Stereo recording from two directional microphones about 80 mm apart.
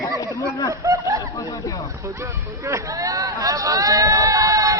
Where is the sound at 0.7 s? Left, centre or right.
Right.